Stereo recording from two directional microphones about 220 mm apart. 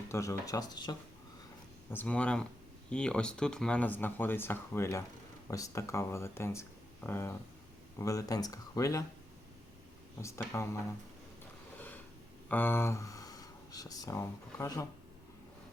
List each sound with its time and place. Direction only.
0.1 s speech: 15° left (ahead or behind)
1.9 s speech: 5° left (ahead or behind)
10.2 s speech: 15° left (ahead or behind)
12.5 s speech: 10° left (ahead or behind)